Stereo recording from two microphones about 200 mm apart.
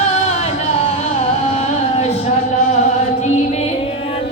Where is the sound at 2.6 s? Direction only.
35° left (ahead or behind).